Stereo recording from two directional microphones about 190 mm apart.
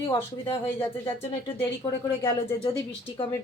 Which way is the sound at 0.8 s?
30° left (ahead or behind).